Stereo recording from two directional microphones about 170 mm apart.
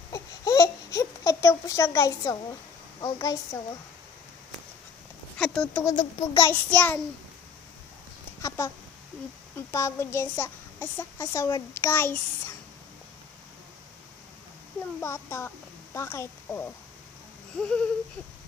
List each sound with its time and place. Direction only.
0.1 s a sound: 20° left (ahead or behind)
3.0 s a woman's voice: 20° left (ahead or behind)
5.4 s speech: centre (ahead or behind)
5.9 s a woman's voice: 25° left (ahead or behind)
6.5 s a child's voice: 10° left (ahead or behind)
8.4 s a child's voice: 15° left (ahead or behind)
15.0 s speech: 15° left (ahead or behind)